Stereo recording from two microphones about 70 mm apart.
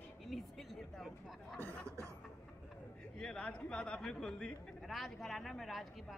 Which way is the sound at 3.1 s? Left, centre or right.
Centre.